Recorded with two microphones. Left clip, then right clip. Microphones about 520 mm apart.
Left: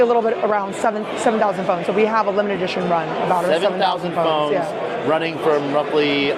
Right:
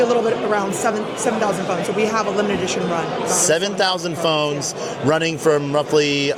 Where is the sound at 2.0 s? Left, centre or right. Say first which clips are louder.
Left 2 dB; left.